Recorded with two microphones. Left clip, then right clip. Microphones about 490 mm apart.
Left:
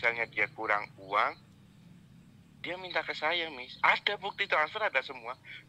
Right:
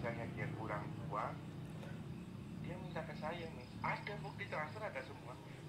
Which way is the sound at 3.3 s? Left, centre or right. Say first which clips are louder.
Left 15 dB; left.